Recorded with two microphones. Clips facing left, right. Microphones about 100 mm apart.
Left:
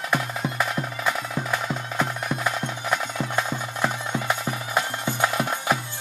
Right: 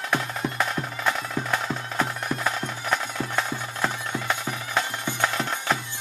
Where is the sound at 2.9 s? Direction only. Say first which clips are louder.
Left 1 dB; 10° left (ahead or behind).